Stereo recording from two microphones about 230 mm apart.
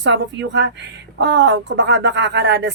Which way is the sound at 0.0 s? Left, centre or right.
Right.